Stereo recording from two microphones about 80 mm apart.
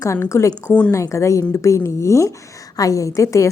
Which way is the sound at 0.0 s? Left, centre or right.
Left.